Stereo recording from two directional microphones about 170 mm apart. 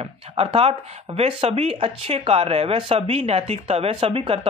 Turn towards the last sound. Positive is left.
turn(degrees=-35)  # may be behind; listen again after turning